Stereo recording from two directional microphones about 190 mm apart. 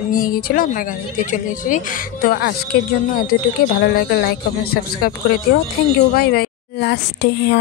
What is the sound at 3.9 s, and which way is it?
Speech, 50° left (ahead or behind).